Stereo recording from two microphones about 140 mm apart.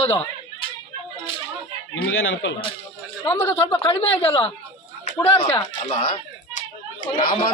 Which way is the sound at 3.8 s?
45° left (ahead or behind).